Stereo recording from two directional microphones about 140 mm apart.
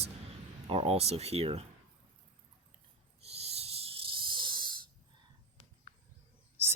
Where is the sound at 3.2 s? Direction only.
45° right (ahead or behind).